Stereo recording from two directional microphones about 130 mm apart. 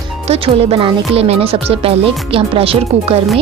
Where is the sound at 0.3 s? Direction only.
50° right (ahead or behind).